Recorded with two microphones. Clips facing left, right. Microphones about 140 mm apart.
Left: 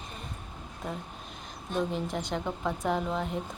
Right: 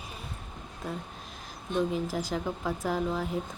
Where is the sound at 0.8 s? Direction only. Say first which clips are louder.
Even; centre (ahead or behind).